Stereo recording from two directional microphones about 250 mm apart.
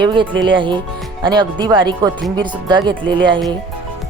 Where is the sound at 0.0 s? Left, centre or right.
Centre.